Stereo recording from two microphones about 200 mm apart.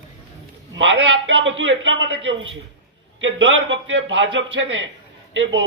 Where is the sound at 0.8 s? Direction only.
65° right (ahead or behind).